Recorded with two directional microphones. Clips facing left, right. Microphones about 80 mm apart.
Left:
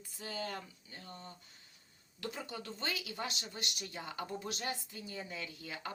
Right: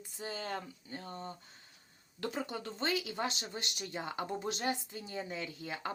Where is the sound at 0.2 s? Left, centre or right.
Right.